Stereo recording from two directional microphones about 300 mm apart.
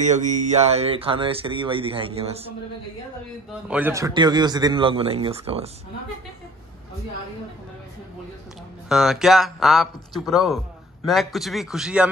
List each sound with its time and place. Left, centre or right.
0.0 s speech: right
3.6 s speech: centre
8.8 s speech: centre